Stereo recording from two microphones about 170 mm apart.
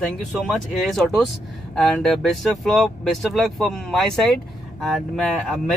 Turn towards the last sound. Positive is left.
turn(degrees=0)  # may be behind; listen again after turning